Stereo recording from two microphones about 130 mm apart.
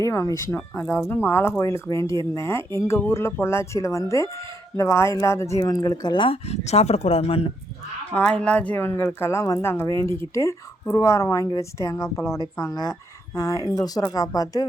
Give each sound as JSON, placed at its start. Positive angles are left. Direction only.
{"t": 0.0, "sound": "speech", "side_deg": 25}
{"t": 8.1, "sound": "speech", "side_deg": 10}